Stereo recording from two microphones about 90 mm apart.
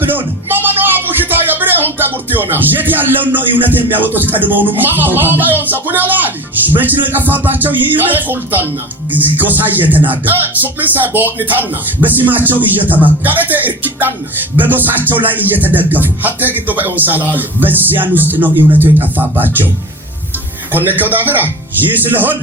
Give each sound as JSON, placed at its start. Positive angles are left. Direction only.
{"t": 0.4, "sound": "speech", "side_deg": -25}
{"t": 6.7, "sound": "music", "side_deg": -20}
{"t": 20.7, "sound": "music", "side_deg": -20}